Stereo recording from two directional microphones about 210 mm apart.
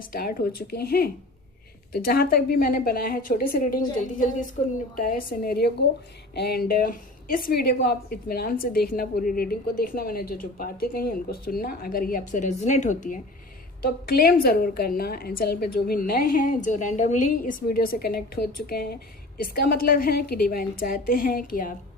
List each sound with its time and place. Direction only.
0.0 s a woman's voice: 45° left (ahead or behind)